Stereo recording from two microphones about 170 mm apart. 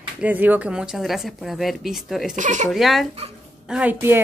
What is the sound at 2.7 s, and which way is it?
A woman's voice, centre (ahead or behind).